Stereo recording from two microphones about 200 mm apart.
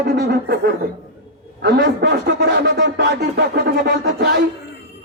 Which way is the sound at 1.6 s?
50° right (ahead or behind).